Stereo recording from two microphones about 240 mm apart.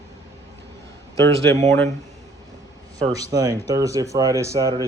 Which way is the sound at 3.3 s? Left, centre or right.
Centre.